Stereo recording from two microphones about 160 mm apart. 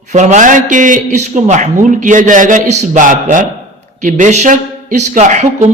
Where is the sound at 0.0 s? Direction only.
45° right (ahead or behind).